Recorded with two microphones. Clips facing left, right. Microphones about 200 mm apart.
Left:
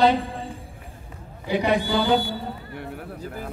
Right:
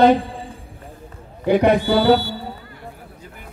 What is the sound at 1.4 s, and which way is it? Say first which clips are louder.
Speech: right 7 dB; 55° right (ahead or behind).